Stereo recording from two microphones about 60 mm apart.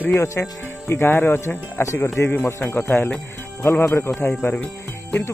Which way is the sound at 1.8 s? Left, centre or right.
Left.